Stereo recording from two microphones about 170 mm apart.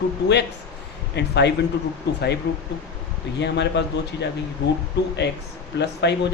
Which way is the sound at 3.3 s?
90° left.